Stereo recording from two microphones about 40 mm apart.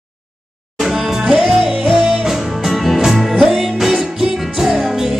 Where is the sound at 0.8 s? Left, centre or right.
Centre.